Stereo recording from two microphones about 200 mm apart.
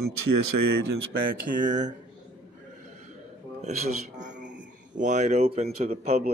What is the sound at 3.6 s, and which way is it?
Speech, 35° right (ahead or behind).